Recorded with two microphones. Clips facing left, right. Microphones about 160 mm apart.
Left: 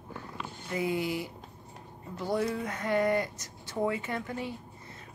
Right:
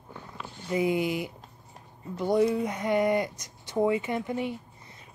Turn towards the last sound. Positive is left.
turn(degrees=-20)  # may be behind; listen again after turning